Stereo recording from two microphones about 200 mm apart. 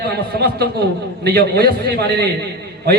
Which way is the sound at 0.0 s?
55° right (ahead or behind).